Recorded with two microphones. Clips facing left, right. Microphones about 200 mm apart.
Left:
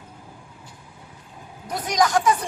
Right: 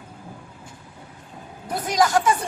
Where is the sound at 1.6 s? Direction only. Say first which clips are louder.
Right 1 dB; centre (ahead or behind).